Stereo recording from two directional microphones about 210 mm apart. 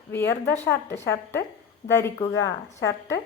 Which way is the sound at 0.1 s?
10° left (ahead or behind).